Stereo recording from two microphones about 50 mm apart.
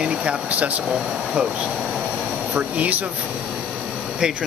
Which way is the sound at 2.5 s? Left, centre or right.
Right.